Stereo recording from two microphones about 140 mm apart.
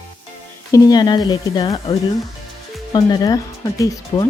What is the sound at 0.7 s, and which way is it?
Speech, 25° left (ahead or behind).